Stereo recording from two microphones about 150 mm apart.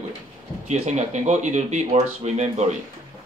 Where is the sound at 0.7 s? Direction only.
50° right (ahead or behind).